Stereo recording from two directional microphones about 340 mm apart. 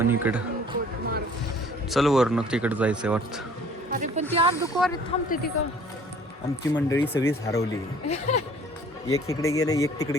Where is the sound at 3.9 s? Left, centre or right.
Right.